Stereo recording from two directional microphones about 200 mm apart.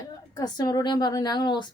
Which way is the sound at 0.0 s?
20° left (ahead or behind).